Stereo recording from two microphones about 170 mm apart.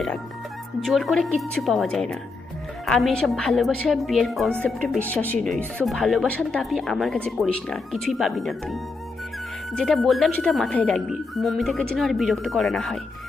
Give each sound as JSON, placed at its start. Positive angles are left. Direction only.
{"t": 0.8, "sound": "speech", "side_deg": 0}